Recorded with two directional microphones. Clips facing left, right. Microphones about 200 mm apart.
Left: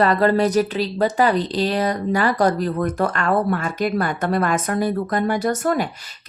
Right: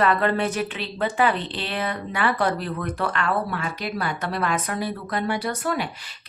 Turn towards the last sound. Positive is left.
turn(degrees=45)  # may be behind; listen again after turning